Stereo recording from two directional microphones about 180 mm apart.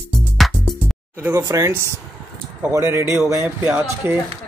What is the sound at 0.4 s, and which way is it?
Music, centre (ahead or behind).